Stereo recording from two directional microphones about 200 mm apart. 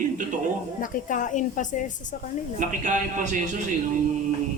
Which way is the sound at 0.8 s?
40° left (ahead or behind).